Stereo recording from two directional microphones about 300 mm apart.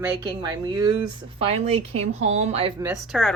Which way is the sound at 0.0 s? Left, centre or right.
Centre.